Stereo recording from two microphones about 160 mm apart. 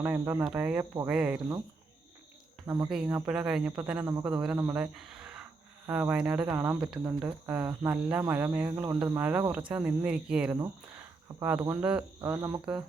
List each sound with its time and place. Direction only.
0.0 s cricket: 10° right (ahead or behind)
2.6 s speech: 20° right (ahead or behind)
2.9 s speech: 5° right (ahead or behind)
3.2 s cricket: 5° right (ahead or behind)
4.3 s speech: 5° right (ahead or behind)
6.5 s cricket: 15° right (ahead or behind)
6.7 s speech: 5° right (ahead or behind)
7.0 s cricket: 10° right (ahead or behind)